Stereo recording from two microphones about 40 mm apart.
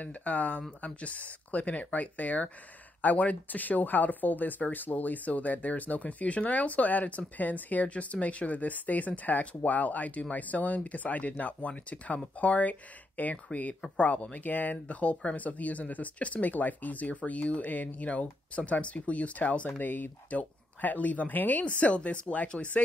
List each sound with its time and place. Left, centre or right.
0.0 s speech: left
21.6 s speech: left